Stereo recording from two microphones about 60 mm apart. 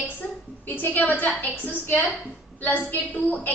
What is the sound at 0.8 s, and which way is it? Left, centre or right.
A woman's voice, left.